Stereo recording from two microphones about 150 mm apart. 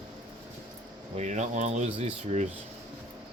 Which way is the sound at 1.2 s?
55° right (ahead or behind).